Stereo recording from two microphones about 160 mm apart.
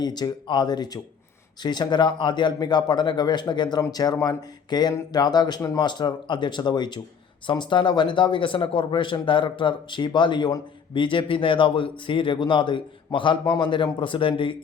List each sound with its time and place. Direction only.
0.0 s a man's voice: 25° left (ahead or behind)